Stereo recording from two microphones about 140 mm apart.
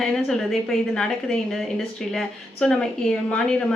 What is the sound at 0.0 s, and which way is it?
Speech, centre (ahead or behind).